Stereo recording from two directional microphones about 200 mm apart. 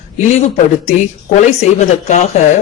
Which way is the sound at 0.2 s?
35° left (ahead or behind).